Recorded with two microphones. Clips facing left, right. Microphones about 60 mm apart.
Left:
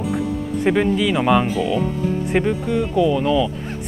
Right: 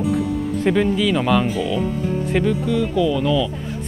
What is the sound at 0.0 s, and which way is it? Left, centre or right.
Music, centre.